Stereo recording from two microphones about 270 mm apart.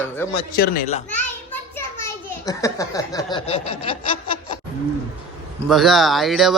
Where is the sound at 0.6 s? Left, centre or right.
Left.